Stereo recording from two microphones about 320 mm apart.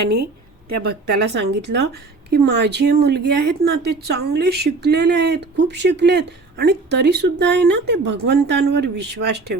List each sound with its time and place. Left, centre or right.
0.7 s speech: right